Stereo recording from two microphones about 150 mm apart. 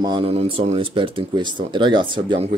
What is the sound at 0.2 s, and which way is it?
Speech, 40° right (ahead or behind).